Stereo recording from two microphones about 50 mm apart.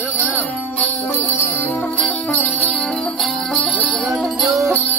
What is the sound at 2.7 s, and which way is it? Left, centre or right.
Music, centre.